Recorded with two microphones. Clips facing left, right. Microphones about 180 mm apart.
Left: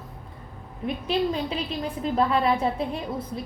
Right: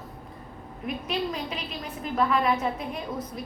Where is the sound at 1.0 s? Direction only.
30° left (ahead or behind).